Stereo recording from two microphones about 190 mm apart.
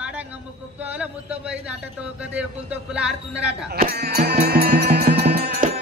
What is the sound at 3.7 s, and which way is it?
Music, 55° right (ahead or behind).